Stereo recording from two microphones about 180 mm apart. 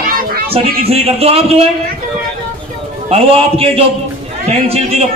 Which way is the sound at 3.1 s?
35° right (ahead or behind).